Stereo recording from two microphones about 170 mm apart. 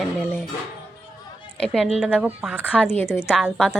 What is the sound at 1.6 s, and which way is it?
Speech, centre (ahead or behind).